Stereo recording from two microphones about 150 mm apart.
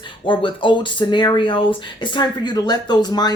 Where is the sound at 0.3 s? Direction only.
35° left (ahead or behind).